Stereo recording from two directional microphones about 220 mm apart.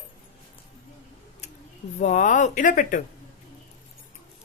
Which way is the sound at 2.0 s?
35° left (ahead or behind).